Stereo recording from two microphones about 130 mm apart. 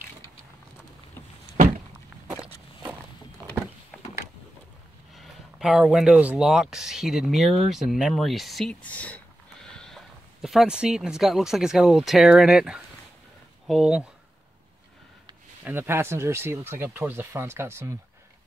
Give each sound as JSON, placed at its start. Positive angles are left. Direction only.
{"t": 2.3, "sound": "walk", "side_deg": -15}
{"t": 5.1, "sound": "speech", "side_deg": 0}
{"t": 8.8, "sound": "speech", "side_deg": 10}
{"t": 15.6, "sound": "speech", "side_deg": -15}